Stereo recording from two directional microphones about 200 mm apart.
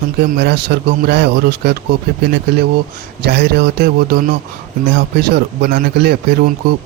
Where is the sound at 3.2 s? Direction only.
55° right (ahead or behind).